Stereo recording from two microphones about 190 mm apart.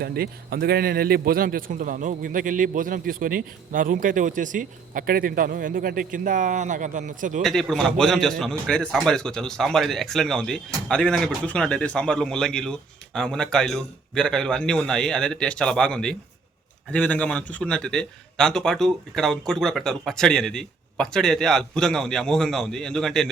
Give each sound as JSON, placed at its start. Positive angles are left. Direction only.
{"t": 0.0, "sound": "a man's voice", "side_deg": -55}
{"t": 7.4, "sound": "a man's voice", "side_deg": 0}